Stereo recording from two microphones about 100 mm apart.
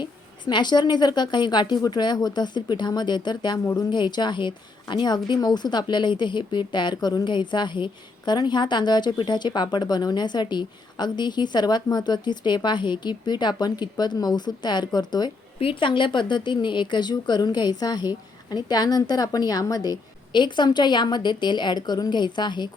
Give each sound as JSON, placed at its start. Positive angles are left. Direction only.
{"t": 0.0, "sound": "a woman's voice", "side_deg": 50}
{"t": 3.6, "sound": "speech", "side_deg": 30}
{"t": 3.9, "sound": "a woman's voice", "side_deg": 50}
{"t": 15.6, "sound": "a woman's voice", "side_deg": 55}